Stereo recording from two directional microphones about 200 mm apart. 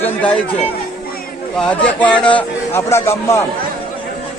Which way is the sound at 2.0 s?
5° left (ahead or behind).